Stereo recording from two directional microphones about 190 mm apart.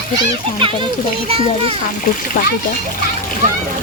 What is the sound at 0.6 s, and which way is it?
Speech, 25° right (ahead or behind).